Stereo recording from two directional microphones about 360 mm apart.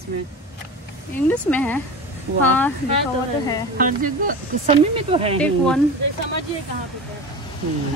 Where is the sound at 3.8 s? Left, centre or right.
Right.